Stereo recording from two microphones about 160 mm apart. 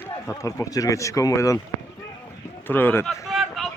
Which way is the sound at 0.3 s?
20° left (ahead or behind).